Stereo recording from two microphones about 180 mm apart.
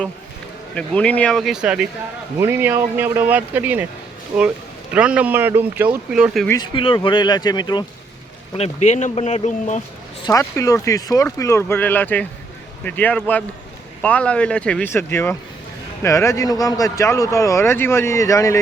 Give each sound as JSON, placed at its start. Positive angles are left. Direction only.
{"t": 0.7, "sound": "speech", "side_deg": 5}
{"t": 4.9, "sound": "speech", "side_deg": -5}
{"t": 6.5, "sound": "speech", "side_deg": 25}
{"t": 8.5, "sound": "speech", "side_deg": 35}
{"t": 10.2, "sound": "speech", "side_deg": 20}